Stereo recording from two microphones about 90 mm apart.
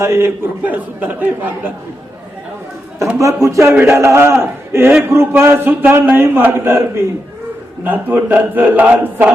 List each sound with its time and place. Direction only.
0.0 s a man's voice: 30° right (ahead or behind)
0.6 s speech: 15° right (ahead or behind)
3.2 s a man's voice: 35° right (ahead or behind)
7.9 s a man's voice: 20° right (ahead or behind)